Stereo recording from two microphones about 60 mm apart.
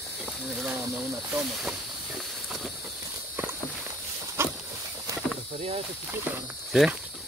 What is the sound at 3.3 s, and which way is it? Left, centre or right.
Walk, right.